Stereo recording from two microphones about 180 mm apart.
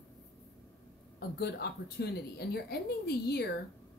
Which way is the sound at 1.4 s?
65° left (ahead or behind).